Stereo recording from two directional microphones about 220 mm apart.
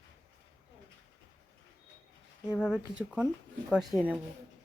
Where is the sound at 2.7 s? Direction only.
5° right (ahead or behind).